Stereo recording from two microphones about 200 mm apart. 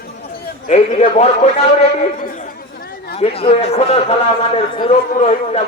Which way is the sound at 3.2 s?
30° left (ahead or behind).